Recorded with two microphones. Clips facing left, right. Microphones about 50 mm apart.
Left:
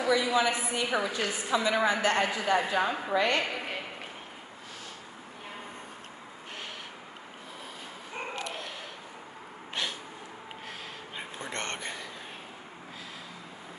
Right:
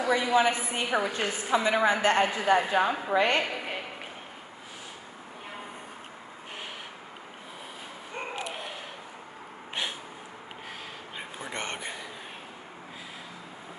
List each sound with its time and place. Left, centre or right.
0.1 s a woman's voice: right
2.8 s a woman's voice: centre
3.1 s a man's voice: right
3.4 s a sound: centre
8.4 s bow-wow: centre
11.1 s a sound: centre